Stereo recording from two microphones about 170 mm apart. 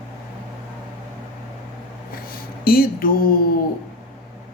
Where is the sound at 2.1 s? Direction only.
60° left (ahead or behind).